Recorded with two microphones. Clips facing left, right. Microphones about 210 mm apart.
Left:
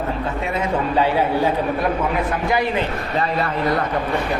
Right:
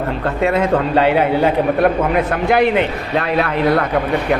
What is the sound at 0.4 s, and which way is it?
Speech, 75° right (ahead or behind).